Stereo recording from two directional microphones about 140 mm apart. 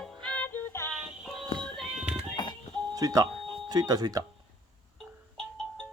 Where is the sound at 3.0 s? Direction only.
25° right (ahead or behind).